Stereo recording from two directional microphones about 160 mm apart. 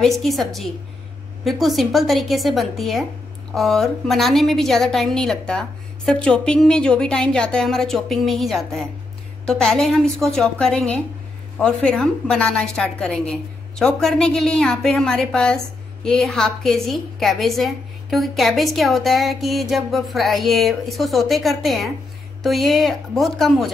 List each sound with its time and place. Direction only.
0.2 s a woman's voice: centre (ahead or behind)